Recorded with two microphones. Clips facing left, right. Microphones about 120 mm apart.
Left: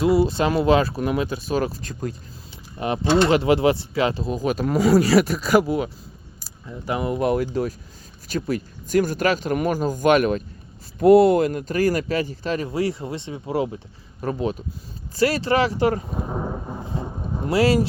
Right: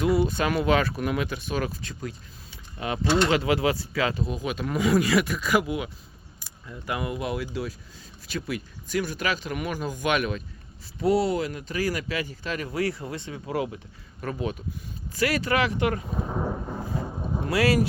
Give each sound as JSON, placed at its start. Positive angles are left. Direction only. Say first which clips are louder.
{"t": 0.0, "sound": "speech", "louder": "left 5 dB", "side_deg": 30}
{"t": 2.7, "sound": "speech", "louder": "left 5 dB", "side_deg": 30}
{"t": 6.4, "sound": "speech", "louder": "left 5 dB", "side_deg": 25}
{"t": 7.2, "sound": "speech", "louder": "left 9 dB", "side_deg": 45}
{"t": 12.6, "sound": "speech", "louder": "left 4 dB", "side_deg": 25}
{"t": 16.8, "sound": "vehicle", "louder": "left 1 dB", "side_deg": 25}